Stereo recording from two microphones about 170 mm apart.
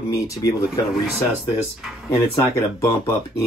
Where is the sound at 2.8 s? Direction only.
15° left (ahead or behind).